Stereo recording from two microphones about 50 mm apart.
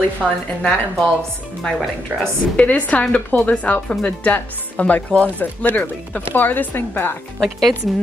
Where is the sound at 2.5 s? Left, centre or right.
Left.